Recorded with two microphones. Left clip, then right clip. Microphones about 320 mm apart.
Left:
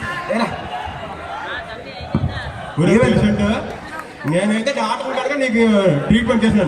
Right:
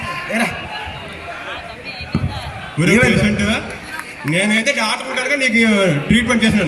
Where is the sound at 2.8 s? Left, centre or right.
Left.